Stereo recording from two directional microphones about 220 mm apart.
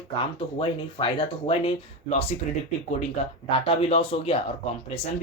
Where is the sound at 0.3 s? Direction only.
25° left (ahead or behind).